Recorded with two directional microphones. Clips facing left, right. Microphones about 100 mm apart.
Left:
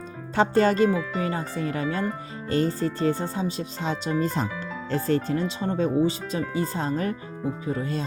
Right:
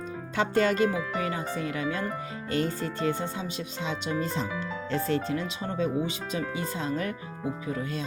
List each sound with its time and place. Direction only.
0.3 s speech: 35° left (ahead or behind)